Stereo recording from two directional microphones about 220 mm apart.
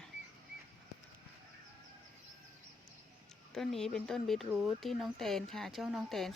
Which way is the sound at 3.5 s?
Centre (ahead or behind).